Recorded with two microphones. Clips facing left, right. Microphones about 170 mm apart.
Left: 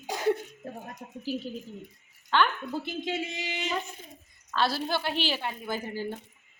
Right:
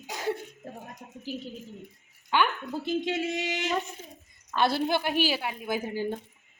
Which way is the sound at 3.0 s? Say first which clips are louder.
Right 4 dB; 70° right (ahead or behind).